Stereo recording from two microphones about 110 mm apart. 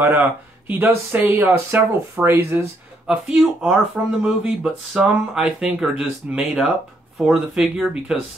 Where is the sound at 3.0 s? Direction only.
5° right (ahead or behind).